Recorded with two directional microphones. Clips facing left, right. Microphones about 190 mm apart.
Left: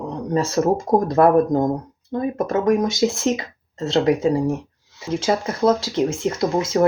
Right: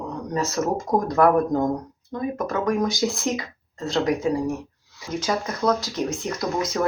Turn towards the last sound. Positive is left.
turn(degrees=25)  # may be behind; listen again after turning